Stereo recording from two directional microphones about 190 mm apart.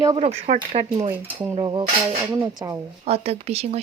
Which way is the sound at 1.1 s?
10° right (ahead or behind).